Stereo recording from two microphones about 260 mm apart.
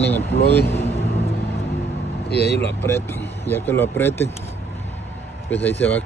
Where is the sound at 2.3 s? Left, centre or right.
Left.